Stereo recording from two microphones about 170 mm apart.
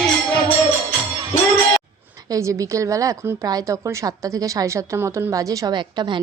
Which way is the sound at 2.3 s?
20° right (ahead or behind).